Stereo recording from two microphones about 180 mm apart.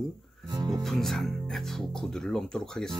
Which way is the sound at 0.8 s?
Centre (ahead or behind).